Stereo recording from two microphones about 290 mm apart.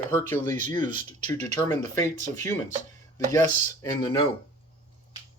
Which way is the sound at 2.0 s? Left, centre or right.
Right.